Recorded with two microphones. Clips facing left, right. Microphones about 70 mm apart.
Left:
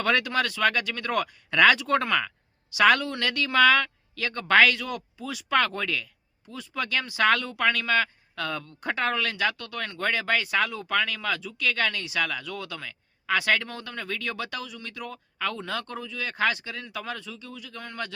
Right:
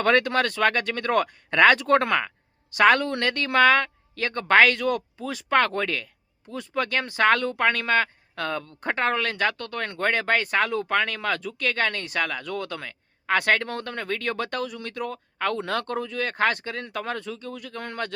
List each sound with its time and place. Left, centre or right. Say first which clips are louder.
0.0 s speech: right 4 dB; right
2.7 s speech: right 2 dB; right